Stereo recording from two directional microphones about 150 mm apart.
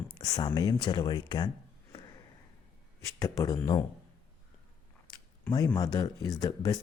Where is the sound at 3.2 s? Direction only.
20° left (ahead or behind).